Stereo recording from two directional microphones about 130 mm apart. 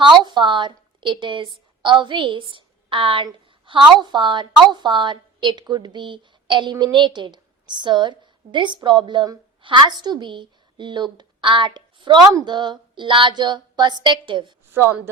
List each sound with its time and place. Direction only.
0.0 s a woman's voice: 35° right (ahead or behind)
14.7 s speech: 20° right (ahead or behind)